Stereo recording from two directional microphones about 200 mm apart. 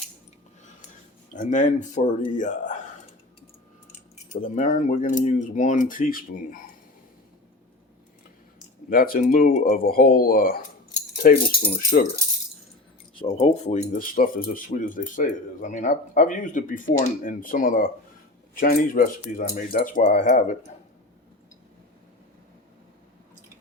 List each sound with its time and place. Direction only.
1.3 s speech: 40° left (ahead or behind)
4.1 s speech: 35° left (ahead or behind)
8.9 s speech: 45° left (ahead or behind)
13.1 s speech: 30° left (ahead or behind)